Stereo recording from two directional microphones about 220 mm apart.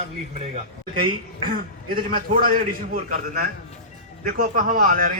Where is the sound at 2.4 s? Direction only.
40° right (ahead or behind).